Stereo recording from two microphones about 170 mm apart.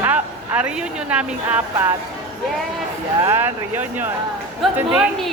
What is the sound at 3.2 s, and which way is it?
Speech, 15° right (ahead or behind).